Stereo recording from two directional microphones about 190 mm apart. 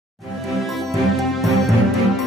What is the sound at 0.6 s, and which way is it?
Music, centre (ahead or behind).